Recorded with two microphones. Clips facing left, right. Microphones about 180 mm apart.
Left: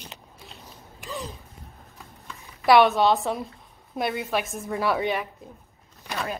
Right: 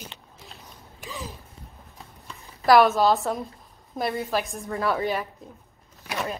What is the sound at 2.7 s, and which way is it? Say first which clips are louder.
A woman's voice: even; centre (ahead or behind).